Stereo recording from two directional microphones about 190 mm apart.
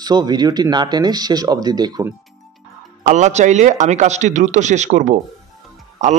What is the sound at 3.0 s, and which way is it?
Speech, 40° right (ahead or behind).